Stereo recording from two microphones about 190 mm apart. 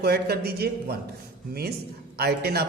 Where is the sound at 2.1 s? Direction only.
55° right (ahead or behind).